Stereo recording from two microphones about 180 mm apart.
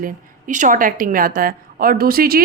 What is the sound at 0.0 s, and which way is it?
A woman's voice, 45° right (ahead or behind).